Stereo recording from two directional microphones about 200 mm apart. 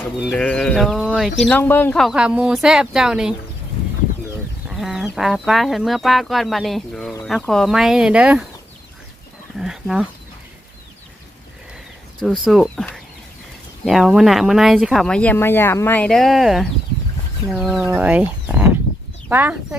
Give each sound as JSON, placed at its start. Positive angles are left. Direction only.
{"t": 0.2, "sound": "speech", "side_deg": 0}
{"t": 4.7, "sound": "chicken", "side_deg": 0}
{"t": 5.1, "sound": "speech", "side_deg": 0}
{"t": 9.6, "sound": "speech", "side_deg": 0}
{"t": 12.5, "sound": "speech", "side_deg": 0}